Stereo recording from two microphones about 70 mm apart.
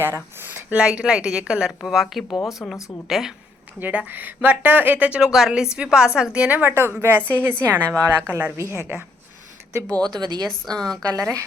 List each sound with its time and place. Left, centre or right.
0.0 s a sound: right
0.9 s a woman's voice: centre
3.8 s speech: right
5.2 s a woman's voice: centre
6.6 s a woman's voice: right
7.9 s speech: right
8.3 s speech: centre
10.1 s speech: right
10.8 s a woman's voice: centre
11.1 s speech: right